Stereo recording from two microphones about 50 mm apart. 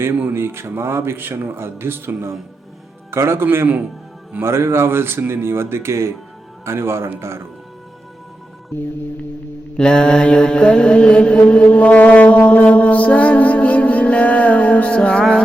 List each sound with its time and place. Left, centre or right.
0.3 s a man's voice: right
9.7 s mantra: centre